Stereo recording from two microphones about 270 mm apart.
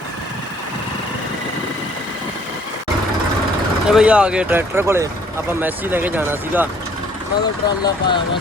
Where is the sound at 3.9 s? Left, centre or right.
Centre.